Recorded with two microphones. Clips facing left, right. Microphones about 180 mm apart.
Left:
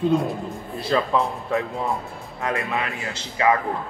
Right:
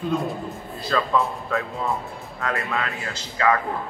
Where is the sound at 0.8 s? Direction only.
20° left (ahead or behind).